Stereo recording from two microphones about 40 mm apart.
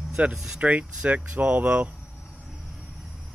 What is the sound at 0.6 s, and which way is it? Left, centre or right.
Speech, right.